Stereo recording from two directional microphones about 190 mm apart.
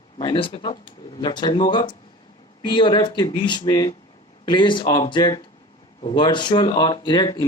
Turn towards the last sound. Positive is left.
turn(degrees=20)  # may be behind; listen again after turning